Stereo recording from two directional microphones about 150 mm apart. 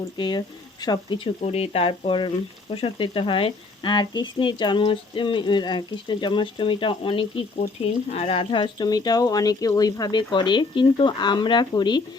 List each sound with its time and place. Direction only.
0.2 s speech: 30° left (ahead or behind)
1.4 s speech: 45° left (ahead or behind); by 12.0 s 30° left (ahead or behind)